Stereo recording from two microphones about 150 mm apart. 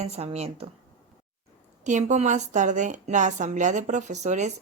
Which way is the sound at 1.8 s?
55° right (ahead or behind).